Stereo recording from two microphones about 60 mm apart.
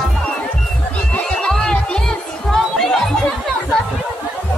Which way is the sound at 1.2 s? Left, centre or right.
Centre.